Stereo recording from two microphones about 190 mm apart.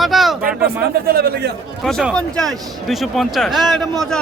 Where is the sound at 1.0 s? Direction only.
55° right (ahead or behind).